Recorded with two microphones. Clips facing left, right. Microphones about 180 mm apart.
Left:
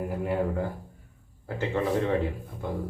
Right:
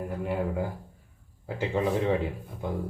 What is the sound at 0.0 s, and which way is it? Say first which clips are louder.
Speech: left 2 dB; 5° left (ahead or behind).